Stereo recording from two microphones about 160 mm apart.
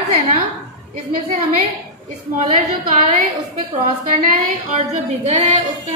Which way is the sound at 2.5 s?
55° right (ahead or behind).